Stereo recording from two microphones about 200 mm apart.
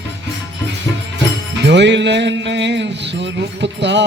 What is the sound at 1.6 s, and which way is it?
Music, 60° right (ahead or behind).